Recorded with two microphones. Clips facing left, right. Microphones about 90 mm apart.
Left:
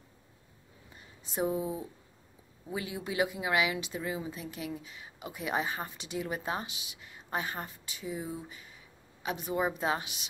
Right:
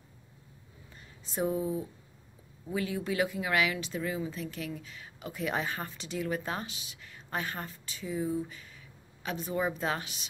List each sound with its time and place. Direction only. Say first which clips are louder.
1.3 s speech: right 1 dB; 15° left (ahead or behind)